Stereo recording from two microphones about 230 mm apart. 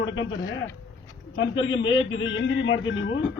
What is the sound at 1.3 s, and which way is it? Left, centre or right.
A man's voice, left.